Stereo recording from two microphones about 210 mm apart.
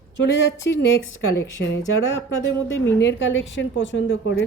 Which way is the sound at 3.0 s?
60° left (ahead or behind).